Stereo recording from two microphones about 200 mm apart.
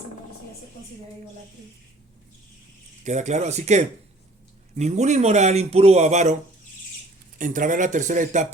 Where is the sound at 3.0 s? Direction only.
35° right (ahead or behind).